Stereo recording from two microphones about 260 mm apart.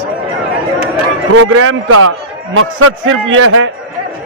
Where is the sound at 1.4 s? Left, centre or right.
Right.